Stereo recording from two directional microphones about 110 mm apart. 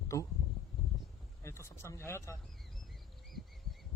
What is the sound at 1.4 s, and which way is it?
Speech, 25° left (ahead or behind).